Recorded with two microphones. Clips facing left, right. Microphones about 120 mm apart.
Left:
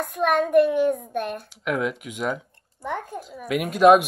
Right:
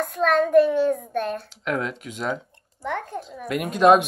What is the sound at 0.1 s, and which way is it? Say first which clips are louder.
A child's voice: right 1 dB; 15° left (ahead or behind).